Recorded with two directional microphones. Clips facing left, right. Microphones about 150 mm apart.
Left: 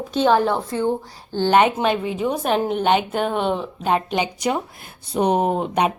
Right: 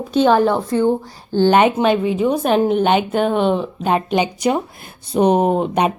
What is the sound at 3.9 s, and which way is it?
A woman's voice, 15° right (ahead or behind).